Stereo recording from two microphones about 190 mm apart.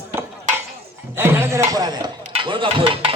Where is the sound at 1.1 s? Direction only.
10° right (ahead or behind).